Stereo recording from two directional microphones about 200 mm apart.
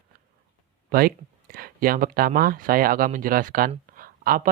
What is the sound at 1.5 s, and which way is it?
Speech, 45° right (ahead or behind).